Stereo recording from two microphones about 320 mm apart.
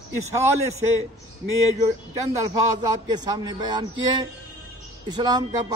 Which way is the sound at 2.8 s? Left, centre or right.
Centre.